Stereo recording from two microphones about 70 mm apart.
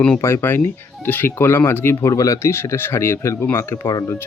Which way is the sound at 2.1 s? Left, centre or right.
Left.